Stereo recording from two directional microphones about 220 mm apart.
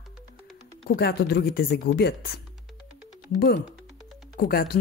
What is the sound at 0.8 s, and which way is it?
Speech, 50° left (ahead or behind).